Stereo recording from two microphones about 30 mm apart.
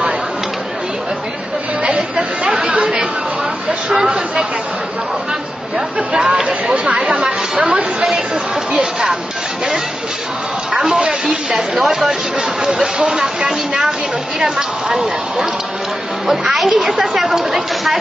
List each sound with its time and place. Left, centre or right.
1.8 s a sound: right
2.4 s chatter: right
6.4 s chatter: right
10.7 s a sound: right
11.2 s speech: centre
16.3 s speech: centre